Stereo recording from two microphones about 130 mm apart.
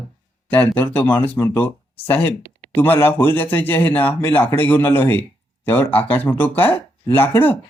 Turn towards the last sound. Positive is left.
turn(degrees=15)  # may be behind; listen again after turning